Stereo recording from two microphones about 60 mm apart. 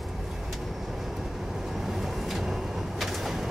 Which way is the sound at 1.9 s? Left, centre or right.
Centre.